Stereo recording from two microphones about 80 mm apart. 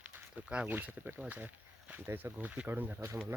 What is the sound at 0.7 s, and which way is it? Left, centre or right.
Speech, right.